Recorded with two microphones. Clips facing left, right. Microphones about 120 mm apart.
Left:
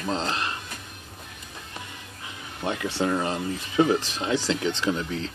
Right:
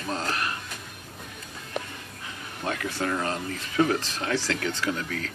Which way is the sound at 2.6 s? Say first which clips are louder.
Left 3 dB; 20° left (ahead or behind).